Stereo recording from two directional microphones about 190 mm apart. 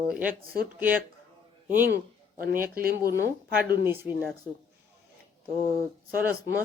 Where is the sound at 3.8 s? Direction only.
10° right (ahead or behind).